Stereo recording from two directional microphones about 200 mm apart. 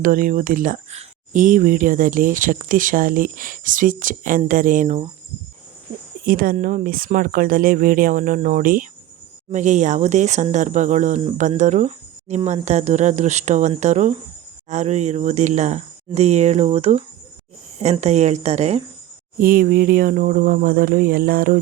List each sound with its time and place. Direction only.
0.0 s speech: 45° right (ahead or behind)
6.2 s speech: 45° right (ahead or behind)
19.4 s speech: 45° right (ahead or behind)